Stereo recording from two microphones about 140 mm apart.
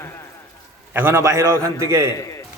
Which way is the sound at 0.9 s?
15° right (ahead or behind).